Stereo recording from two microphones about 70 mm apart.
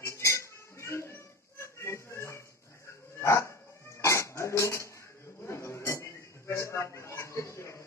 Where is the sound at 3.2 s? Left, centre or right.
Left.